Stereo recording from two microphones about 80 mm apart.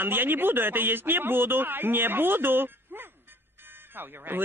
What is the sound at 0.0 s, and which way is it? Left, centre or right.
A man's voice, right.